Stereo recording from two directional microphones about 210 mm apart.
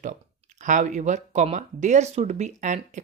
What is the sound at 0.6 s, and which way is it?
Speech, 35° right (ahead or behind).